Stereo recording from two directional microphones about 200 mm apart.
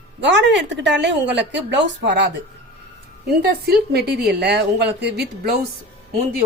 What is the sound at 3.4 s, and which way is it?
A woman's voice, 55° right (ahead or behind).